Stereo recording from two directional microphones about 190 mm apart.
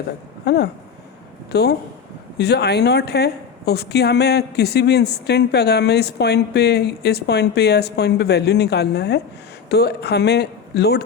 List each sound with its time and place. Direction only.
0.4 s a woman's voice: 60° left (ahead or behind)